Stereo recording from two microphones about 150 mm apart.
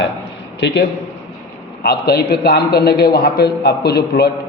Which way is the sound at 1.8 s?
90° left.